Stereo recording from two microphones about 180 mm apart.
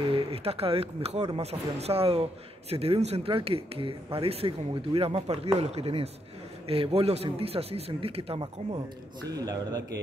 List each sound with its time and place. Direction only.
0.1 s speech: 35° right (ahead or behind)